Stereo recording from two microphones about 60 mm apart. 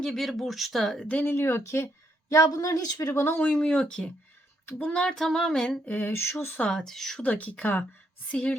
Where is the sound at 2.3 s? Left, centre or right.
Left.